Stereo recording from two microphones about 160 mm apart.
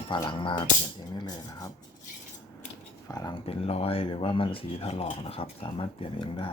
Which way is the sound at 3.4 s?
40° left (ahead or behind).